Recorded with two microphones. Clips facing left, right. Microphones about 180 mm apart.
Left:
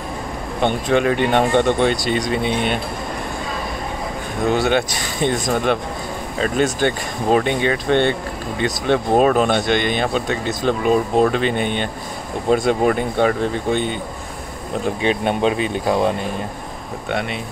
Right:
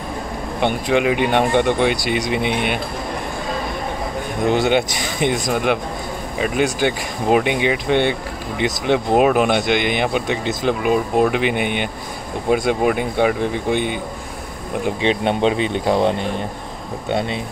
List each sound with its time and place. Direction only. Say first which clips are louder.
0.6 s speech: left 1 dB; 10° right (ahead or behind)
4.5 s speech: right 1 dB; 20° right (ahead or behind)
15.0 s speech: right 1 dB; 25° right (ahead or behind)